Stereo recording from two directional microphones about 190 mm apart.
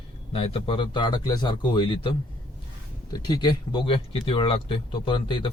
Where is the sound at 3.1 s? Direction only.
20° left (ahead or behind).